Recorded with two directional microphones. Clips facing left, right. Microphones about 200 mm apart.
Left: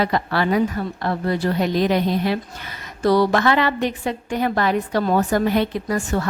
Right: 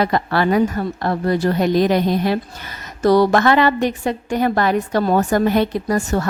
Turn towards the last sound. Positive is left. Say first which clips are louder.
# right 3 dB
turn(degrees=-40)  # may be behind; listen again after turning